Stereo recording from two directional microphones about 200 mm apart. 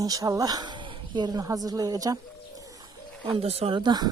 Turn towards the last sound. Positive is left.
turn(degrees=-20)  # may be behind; listen again after turning